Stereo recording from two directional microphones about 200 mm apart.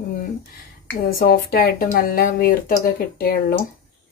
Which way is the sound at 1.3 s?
45° left (ahead or behind).